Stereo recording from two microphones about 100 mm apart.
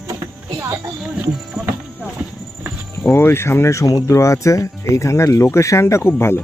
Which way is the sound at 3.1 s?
25° left (ahead or behind).